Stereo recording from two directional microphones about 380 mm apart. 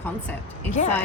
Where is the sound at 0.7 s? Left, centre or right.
Centre.